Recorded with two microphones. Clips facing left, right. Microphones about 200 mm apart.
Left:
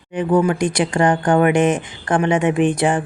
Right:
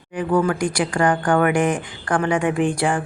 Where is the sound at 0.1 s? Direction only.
20° left (ahead or behind).